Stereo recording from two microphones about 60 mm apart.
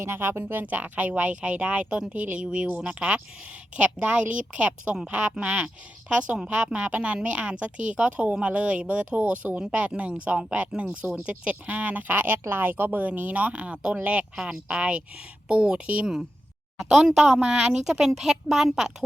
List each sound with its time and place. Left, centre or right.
0.0 s speech: right
0.6 s a woman's voice: right
17.1 s a woman's voice: centre